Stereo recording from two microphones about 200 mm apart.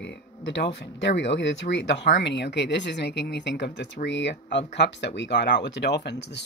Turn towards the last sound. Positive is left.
turn(degrees=55)  # may be behind; listen again after turning